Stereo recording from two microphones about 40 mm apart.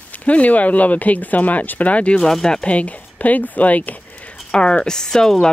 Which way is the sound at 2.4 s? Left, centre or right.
Centre.